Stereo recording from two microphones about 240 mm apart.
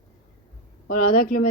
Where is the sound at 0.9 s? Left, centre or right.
Left.